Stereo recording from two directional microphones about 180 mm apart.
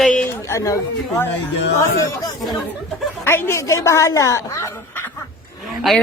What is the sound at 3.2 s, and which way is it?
Speech, 15° left (ahead or behind).